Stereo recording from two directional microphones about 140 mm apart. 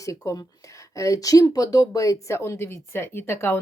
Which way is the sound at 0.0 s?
25° left (ahead or behind).